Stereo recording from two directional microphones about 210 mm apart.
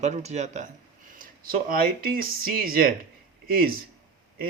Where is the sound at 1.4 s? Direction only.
45° right (ahead or behind).